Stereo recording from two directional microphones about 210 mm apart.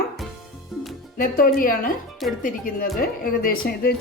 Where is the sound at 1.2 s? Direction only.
40° left (ahead or behind).